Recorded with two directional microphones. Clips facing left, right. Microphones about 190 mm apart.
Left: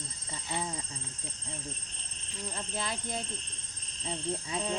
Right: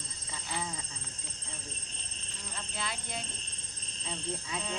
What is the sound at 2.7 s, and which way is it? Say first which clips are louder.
Speech: left 3 dB; 40° left (ahead or behind).